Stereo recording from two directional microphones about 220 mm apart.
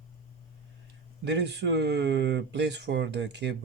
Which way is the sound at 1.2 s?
50° right (ahead or behind).